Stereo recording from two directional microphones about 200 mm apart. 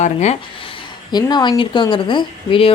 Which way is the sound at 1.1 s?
20° left (ahead or behind).